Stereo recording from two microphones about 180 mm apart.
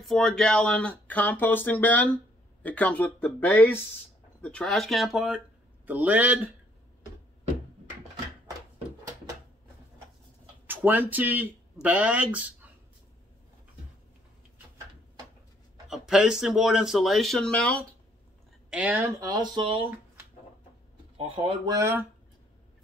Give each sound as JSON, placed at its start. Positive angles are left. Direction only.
{"t": 0.0, "sound": "a man's voice", "side_deg": 5}
{"t": 10.7, "sound": "speech", "side_deg": -10}
{"t": 15.9, "sound": "speech", "side_deg": -5}
{"t": 18.7, "sound": "speech", "side_deg": -5}
{"t": 21.2, "sound": "speech", "side_deg": -30}
{"t": 21.7, "sound": "a man's voice", "side_deg": -15}